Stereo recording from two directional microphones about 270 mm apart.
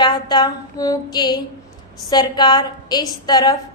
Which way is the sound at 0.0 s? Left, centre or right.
Centre.